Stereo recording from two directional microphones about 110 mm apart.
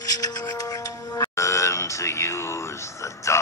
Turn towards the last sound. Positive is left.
turn(degrees=25)  # may be behind; listen again after turning